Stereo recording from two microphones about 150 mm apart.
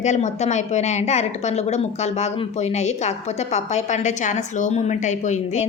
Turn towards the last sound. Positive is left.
turn(degrees=50)  # may be behind; listen again after turning